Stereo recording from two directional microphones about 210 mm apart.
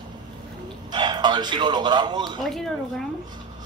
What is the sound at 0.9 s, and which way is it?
Speech, 20° right (ahead or behind).